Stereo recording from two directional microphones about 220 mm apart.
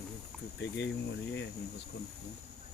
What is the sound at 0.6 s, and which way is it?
Speech, 55° left (ahead or behind).